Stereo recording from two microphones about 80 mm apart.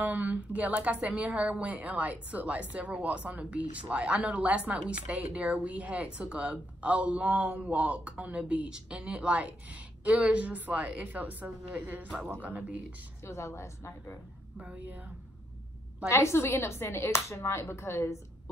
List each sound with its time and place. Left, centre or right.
0.0 s a woman's voice: centre
13.2 s speech: left
14.6 s a woman's voice: centre
16.1 s speech: left